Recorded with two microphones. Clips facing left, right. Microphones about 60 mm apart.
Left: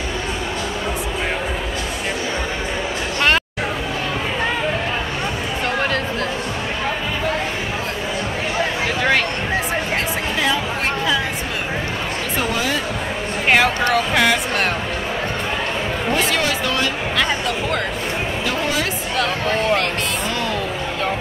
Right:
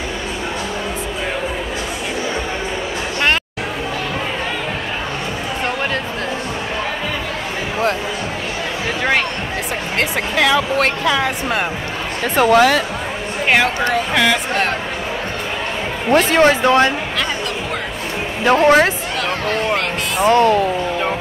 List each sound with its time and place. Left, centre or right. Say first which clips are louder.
9.9 s a sound: right 3 dB; right
12.4 s a sound: right 11 dB; right
14.1 s speech: right 1 dB; centre
16.3 s speech: right 8 dB; right
18.4 s speech: right 13 dB; right
20.2 s speech: right 11 dB; right